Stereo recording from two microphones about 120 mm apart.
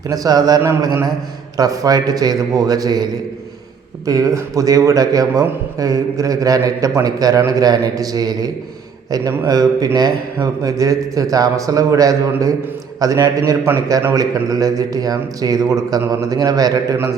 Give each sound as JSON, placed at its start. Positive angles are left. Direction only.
{"t": 0.1, "sound": "a man's voice", "side_deg": -30}